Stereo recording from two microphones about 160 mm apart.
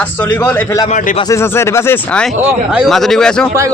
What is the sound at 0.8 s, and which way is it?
Speech, 50° left (ahead or behind).